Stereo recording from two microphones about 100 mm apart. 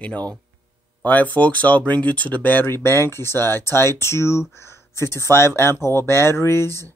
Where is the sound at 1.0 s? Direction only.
15° left (ahead or behind).